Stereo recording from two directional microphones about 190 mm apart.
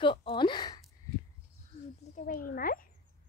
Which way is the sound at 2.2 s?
45° left (ahead or behind).